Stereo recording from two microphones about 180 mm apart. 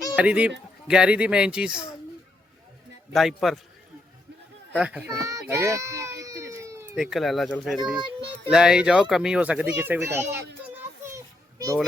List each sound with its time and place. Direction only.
0.2 s a child's voice: 5° right (ahead or behind)
3.1 s a child's voice: centre (ahead or behind)
4.7 s a child's voice: 5° right (ahead or behind)
5.1 s a sound: 15° right (ahead or behind)
6.9 s a child's voice: centre (ahead or behind)
11.1 s children playing: 20° right (ahead or behind)